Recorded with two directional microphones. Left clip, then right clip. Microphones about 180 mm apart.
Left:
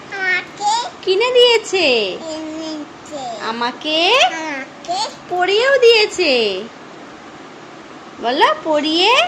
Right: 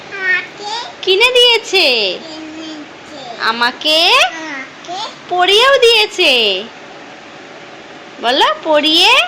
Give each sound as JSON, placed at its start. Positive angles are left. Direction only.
{"t": 0.2, "sound": "child singing", "side_deg": 30}
{"t": 1.0, "sound": "a woman's voice", "side_deg": 0}
{"t": 3.4, "sound": "a woman's voice", "side_deg": 0}
{"t": 5.4, "sound": "a woman's voice", "side_deg": -5}
{"t": 8.2, "sound": "a woman's voice", "side_deg": 0}